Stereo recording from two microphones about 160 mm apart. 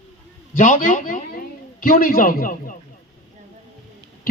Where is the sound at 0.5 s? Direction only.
55° left (ahead or behind).